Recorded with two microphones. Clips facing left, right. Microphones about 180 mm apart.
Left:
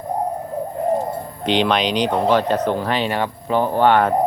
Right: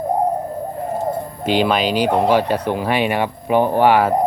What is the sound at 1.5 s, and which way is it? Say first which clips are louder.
Speech: right 1 dB; 5° right (ahead or behind).